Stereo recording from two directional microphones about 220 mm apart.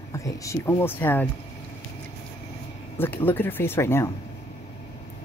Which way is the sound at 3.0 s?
10° left (ahead or behind).